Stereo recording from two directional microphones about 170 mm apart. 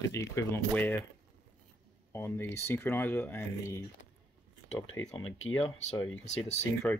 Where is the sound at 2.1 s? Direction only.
15° left (ahead or behind).